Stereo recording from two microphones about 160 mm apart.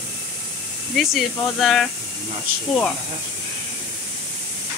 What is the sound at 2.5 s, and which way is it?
Speech, 65° right (ahead or behind).